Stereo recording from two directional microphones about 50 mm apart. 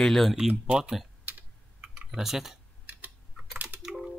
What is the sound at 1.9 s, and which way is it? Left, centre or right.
Speech, centre.